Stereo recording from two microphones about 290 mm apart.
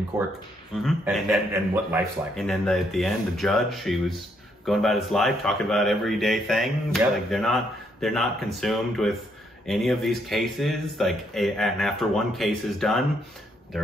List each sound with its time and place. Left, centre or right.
0.1 s speech: centre